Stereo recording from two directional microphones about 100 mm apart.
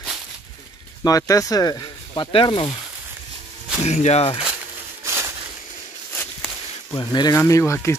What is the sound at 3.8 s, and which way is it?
Speech, 90° left.